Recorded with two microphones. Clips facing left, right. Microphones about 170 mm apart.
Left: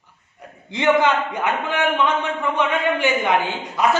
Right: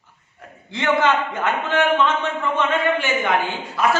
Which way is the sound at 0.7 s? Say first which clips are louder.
Left 2 dB; 15° left (ahead or behind).